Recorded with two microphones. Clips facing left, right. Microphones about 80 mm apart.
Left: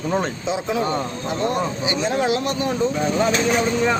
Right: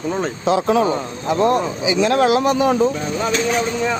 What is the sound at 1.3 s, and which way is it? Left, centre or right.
A man's voice, right.